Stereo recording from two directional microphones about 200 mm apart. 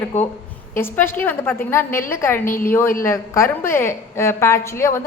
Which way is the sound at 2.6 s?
10° left (ahead or behind).